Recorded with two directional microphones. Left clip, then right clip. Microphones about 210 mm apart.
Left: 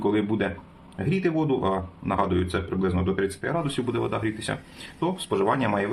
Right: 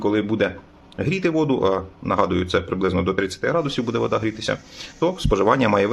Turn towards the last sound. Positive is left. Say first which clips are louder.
# right 7 dB
turn(degrees=-35)  # may be behind; listen again after turning